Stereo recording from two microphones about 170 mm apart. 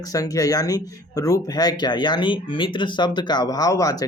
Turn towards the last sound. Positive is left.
turn(degrees=20)  # may be behind; listen again after turning